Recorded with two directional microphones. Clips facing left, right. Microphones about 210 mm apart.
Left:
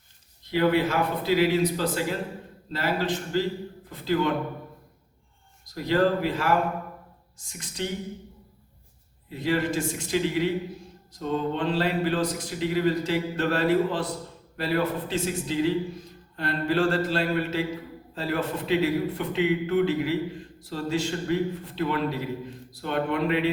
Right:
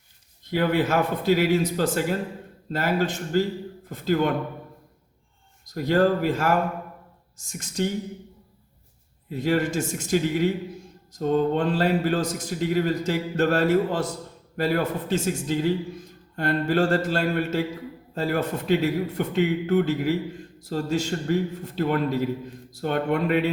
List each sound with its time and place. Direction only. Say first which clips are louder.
0.5 s speech: right 1 dB; 50° right (ahead or behind)
5.7 s speech: right 2 dB; 45° right (ahead or behind)
9.4 s speech: right 2 dB; 45° right (ahead or behind)